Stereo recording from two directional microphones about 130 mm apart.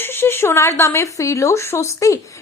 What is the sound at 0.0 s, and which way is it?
Speech, 15° left (ahead or behind).